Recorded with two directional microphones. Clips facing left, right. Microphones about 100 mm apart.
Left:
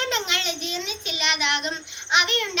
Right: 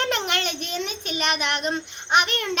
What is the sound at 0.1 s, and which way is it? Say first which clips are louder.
A child's voice: right 2 dB; 50° right (ahead or behind).